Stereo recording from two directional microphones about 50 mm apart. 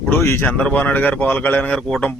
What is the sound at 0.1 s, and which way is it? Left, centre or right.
Speech, left.